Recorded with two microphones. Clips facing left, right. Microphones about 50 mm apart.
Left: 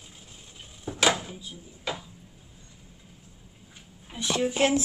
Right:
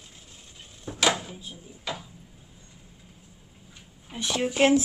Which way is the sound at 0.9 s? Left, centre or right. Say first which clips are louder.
Left 1 dB; centre.